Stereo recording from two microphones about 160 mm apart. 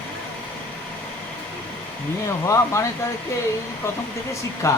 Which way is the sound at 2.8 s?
15° left (ahead or behind).